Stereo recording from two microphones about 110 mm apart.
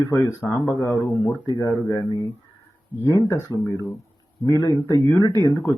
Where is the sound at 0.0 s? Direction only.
30° left (ahead or behind).